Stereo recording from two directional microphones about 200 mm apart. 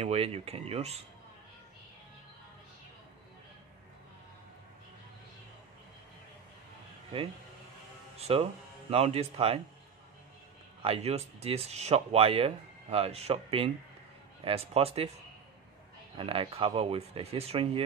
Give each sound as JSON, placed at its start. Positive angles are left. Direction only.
{"t": 0.0, "sound": "speech", "side_deg": -30}
{"t": 8.3, "sound": "speech", "side_deg": -30}
{"t": 10.8, "sound": "speech", "side_deg": -30}
{"t": 16.2, "sound": "speech", "side_deg": -30}